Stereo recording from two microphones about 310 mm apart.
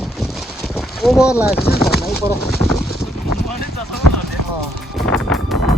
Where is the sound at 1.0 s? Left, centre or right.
Centre.